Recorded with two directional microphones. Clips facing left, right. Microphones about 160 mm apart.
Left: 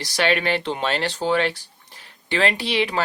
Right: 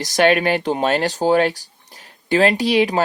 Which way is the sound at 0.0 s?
45° right (ahead or behind).